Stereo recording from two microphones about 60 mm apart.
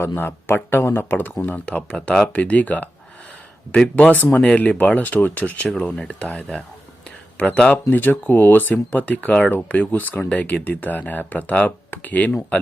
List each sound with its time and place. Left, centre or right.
0.2 s speech: left
1.6 s speech: centre
4.1 s speech: left
4.4 s speech: centre
4.6 s speech: left